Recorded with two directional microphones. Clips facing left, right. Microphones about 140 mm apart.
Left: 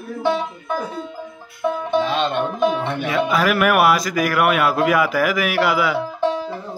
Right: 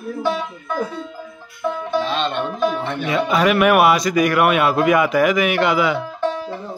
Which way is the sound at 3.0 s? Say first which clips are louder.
Right 2 dB; centre (ahead or behind).